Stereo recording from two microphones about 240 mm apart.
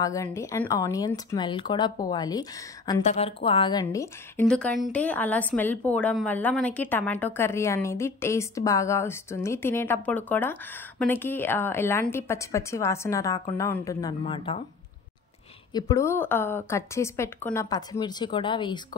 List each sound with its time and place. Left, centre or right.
0.0 s a woman's voice: centre
3.8 s a woman's voice: centre
15.7 s a woman's voice: centre